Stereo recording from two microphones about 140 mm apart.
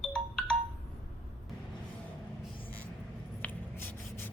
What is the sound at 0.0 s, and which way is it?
Music, 5° left (ahead or behind).